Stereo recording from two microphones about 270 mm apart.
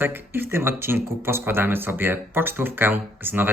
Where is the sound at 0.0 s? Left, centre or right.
Centre.